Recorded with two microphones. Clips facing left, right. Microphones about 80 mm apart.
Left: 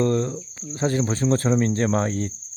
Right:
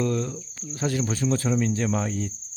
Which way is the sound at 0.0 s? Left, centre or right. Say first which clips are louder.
Left 4 dB; left.